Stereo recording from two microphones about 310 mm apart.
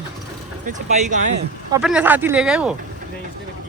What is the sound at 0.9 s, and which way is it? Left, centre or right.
Speech, right.